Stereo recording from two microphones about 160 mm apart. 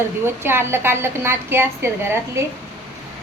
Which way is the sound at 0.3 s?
15° right (ahead or behind).